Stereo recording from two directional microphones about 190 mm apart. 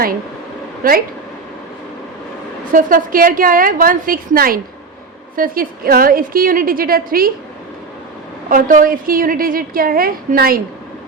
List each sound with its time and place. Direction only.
0.8 s a woman's voice: 50° right (ahead or behind)
2.7 s a woman's voice: 45° right (ahead or behind)
8.4 s a woman's voice: 45° right (ahead or behind)